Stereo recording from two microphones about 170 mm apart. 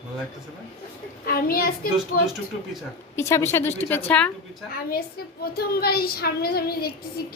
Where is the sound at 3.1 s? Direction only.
15° left (ahead or behind).